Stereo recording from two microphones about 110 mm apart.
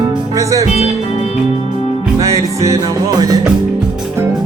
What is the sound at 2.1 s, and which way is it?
Music, 30° right (ahead or behind).